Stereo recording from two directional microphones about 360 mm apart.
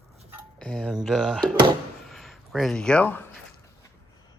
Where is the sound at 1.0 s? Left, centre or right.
Centre.